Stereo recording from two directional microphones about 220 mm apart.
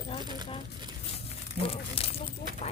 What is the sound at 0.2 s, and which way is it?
Speech, 20° right (ahead or behind).